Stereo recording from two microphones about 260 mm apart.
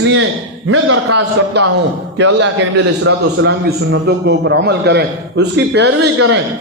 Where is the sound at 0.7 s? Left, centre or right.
Right.